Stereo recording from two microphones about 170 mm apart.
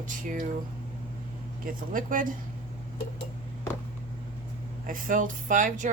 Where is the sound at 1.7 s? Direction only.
55° right (ahead or behind).